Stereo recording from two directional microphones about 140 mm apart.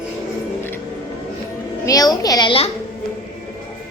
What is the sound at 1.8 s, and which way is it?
Speech, 25° left (ahead or behind).